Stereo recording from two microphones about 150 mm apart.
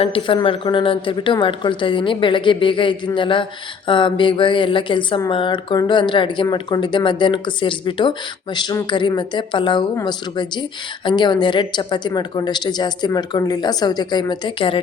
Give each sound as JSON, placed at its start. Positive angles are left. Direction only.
{"t": 0.0, "sound": "a woman's voice", "side_deg": 35}